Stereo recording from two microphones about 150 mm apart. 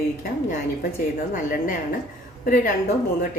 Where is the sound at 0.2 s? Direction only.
70° left (ahead or behind).